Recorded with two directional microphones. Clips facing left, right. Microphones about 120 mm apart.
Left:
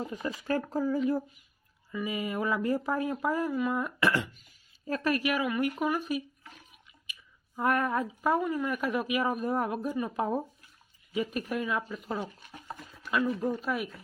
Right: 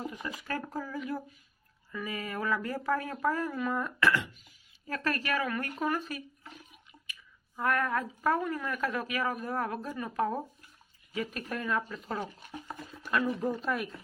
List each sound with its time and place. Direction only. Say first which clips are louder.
0.1 s speech: left 6 dB; 30° left (ahead or behind)
1.9 s speech: left 4 dB; 15° left (ahead or behind)
13.5 s speech: left 1 dB; 5° left (ahead or behind)